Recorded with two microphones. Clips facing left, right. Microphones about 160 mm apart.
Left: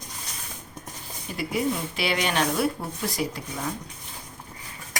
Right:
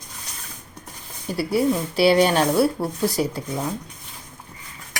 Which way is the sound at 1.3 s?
35° right (ahead or behind).